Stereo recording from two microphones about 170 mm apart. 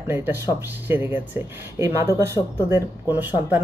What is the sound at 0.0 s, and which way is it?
Speech, 15° right (ahead or behind).